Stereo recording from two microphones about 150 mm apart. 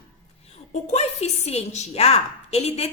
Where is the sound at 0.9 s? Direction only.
45° left (ahead or behind).